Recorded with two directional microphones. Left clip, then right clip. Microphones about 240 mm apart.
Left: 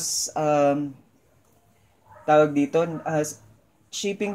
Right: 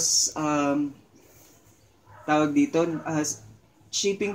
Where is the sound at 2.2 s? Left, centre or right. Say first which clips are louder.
Left 4 dB; left.